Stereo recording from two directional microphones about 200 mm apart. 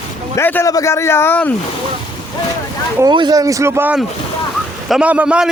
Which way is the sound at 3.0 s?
20° right (ahead or behind).